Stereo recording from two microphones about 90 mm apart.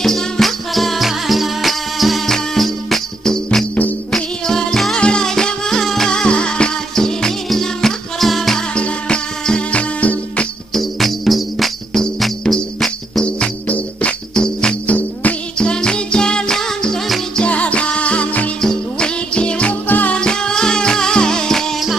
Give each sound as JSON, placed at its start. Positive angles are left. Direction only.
{"t": 0.0, "sound": "music", "side_deg": 5}
{"t": 3.4, "sound": "music", "side_deg": 15}
{"t": 10.7, "sound": "music", "side_deg": 5}